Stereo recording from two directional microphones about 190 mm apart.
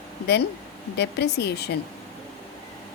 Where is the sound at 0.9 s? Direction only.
60° left (ahead or behind).